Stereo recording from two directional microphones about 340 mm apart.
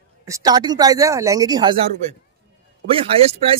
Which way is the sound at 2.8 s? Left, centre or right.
Centre.